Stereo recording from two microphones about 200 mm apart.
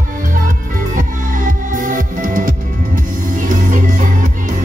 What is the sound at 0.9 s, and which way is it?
Music, 40° right (ahead or behind).